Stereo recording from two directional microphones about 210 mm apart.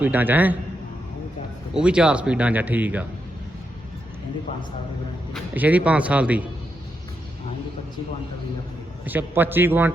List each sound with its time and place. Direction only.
0.0 s a man's voice: 10° right (ahead or behind)
1.7 s a man's voice: 5° right (ahead or behind)
5.5 s a man's voice: 5° right (ahead or behind)
9.0 s a man's voice: 10° right (ahead or behind)